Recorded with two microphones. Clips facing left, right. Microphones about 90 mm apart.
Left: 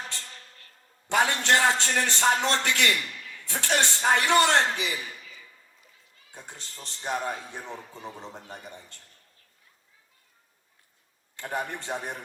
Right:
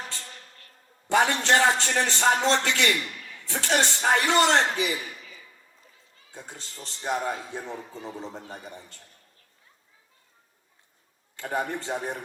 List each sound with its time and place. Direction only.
1.0 s a man's voice: 20° right (ahead or behind)
6.3 s a man's voice: 20° right (ahead or behind)
11.3 s a man's voice: 20° right (ahead or behind)